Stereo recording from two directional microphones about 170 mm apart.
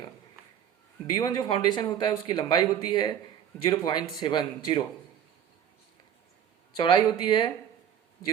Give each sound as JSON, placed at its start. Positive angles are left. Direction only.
{"t": 1.1, "sound": "speech", "side_deg": 25}
{"t": 6.7, "sound": "speech", "side_deg": 30}